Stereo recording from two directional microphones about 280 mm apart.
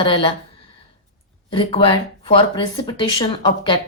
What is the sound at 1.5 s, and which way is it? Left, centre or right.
A woman's voice, centre.